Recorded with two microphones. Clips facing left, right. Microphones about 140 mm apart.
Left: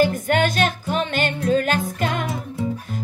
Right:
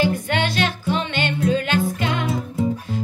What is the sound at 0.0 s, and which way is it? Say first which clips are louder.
Music: left 3 dB; 45° left (ahead or behind).